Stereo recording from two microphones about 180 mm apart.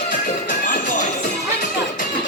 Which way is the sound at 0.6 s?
45° left (ahead or behind).